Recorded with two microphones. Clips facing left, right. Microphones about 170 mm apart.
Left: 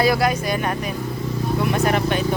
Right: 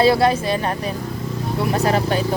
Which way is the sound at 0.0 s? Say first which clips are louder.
Right 3 dB; 30° right (ahead or behind).